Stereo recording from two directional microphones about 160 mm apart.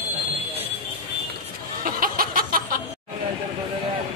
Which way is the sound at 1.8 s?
65° right (ahead or behind).